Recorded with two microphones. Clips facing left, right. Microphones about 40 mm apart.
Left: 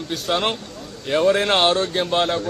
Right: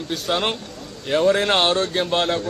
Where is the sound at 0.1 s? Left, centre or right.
Centre.